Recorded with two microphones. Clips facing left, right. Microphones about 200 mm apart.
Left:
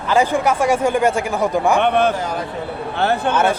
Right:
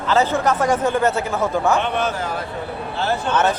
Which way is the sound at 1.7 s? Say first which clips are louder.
Left 5 dB; 55° left (ahead or behind).